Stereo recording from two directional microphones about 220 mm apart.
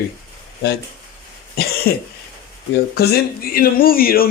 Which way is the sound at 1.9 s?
40° left (ahead or behind).